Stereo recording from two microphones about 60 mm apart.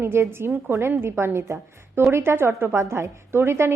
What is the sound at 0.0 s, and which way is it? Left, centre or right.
A woman's voice, right.